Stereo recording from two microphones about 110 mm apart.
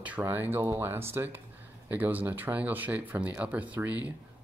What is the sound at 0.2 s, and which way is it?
Speech, 20° right (ahead or behind).